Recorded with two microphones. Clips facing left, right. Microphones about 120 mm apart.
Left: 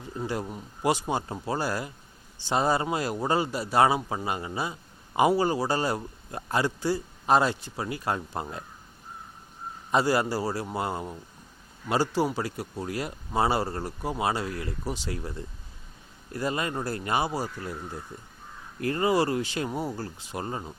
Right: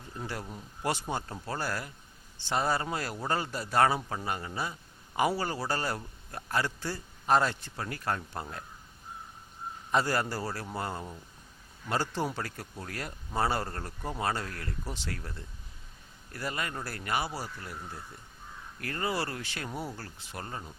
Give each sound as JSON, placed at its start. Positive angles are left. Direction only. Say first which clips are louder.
{"t": 0.2, "sound": "a man's voice", "louder": "left 7 dB", "side_deg": 20}
{"t": 9.9, "sound": "a man's voice", "louder": "left 5 dB", "side_deg": 15}